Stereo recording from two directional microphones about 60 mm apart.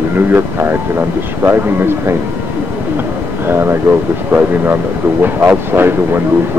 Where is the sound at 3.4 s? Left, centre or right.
Right.